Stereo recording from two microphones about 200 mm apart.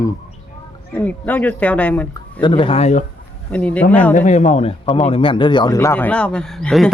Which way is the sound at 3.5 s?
5° left (ahead or behind).